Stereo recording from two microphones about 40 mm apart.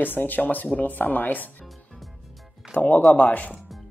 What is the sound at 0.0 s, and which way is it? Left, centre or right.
Speech, left.